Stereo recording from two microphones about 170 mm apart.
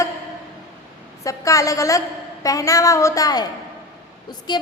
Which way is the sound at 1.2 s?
20° left (ahead or behind).